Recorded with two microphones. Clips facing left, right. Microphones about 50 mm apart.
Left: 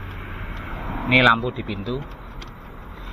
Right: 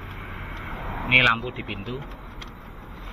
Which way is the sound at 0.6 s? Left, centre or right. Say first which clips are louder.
Left 3 dB; centre.